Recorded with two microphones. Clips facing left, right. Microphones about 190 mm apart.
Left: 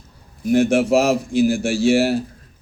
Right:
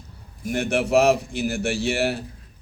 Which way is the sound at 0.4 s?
60° right (ahead or behind).